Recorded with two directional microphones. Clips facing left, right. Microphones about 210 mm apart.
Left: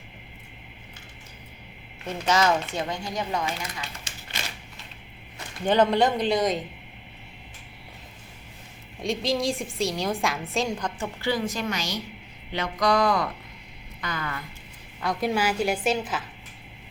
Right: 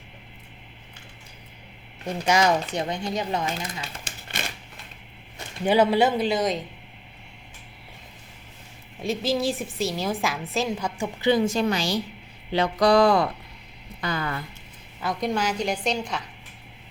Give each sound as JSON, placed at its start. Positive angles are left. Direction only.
{"t": 2.0, "sound": "a man's voice", "side_deg": -15}
{"t": 5.6, "sound": "a man's voice", "side_deg": -10}
{"t": 9.0, "sound": "a woman's voice", "side_deg": -5}
{"t": 11.2, "sound": "speech", "side_deg": -20}
{"t": 15.0, "sound": "a woman's voice", "side_deg": 5}